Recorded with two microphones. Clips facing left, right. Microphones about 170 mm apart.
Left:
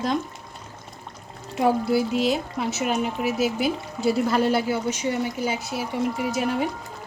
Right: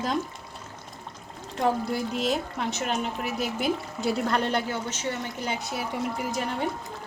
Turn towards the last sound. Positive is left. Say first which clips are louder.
# left 5 dB
turn(degrees=0)  # may be behind; listen again after turning